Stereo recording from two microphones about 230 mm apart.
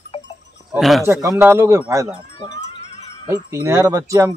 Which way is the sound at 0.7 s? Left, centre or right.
Centre.